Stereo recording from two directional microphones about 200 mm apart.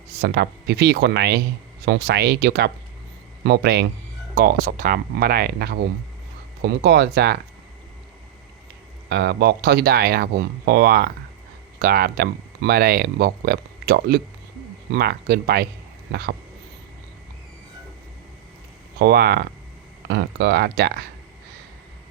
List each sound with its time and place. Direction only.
0.1 s speech: 55° right (ahead or behind)
9.0 s speech: 55° right (ahead or behind)
18.9 s speech: 55° right (ahead or behind)